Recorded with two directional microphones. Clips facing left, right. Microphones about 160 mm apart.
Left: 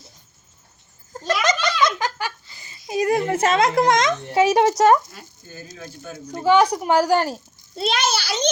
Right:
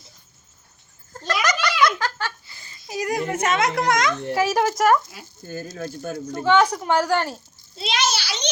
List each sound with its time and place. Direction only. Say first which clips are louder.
1.1 s a sound: left 3 dB; 20° left (ahead or behind)
1.8 s a child's voice: even; 20° left (ahead or behind)
5.7 s speech: right 5 dB; 50° right (ahead or behind)
6.3 s speech: left 2 dB; 10° left (ahead or behind)
7.8 s a child's voice: left 3 dB; 50° left (ahead or behind)